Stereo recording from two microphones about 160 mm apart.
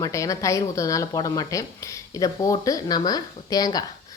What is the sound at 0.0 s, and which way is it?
Speech, 20° left (ahead or behind).